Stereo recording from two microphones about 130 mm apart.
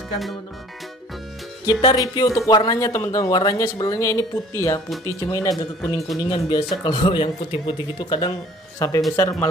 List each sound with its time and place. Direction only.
1.8 s speech: 35° left (ahead or behind)
8.7 s speech: 25° left (ahead or behind)